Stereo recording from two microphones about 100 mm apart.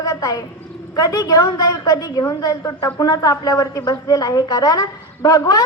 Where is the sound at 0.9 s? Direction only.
35° left (ahead or behind).